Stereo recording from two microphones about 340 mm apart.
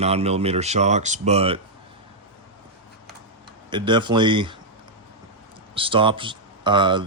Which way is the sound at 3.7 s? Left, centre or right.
Centre.